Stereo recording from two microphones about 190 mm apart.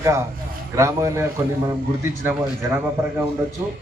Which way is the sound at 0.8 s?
15° right (ahead or behind).